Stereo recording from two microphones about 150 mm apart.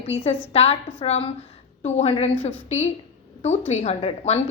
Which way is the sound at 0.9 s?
40° left (ahead or behind).